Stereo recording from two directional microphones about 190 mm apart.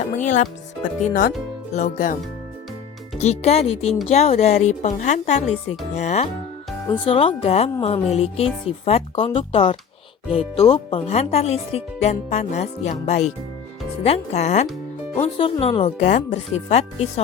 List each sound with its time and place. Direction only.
0.2 s speech: 40° left (ahead or behind)
3.2 s speech: 35° left (ahead or behind)